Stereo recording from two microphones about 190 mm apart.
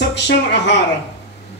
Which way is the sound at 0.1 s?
65° left (ahead or behind).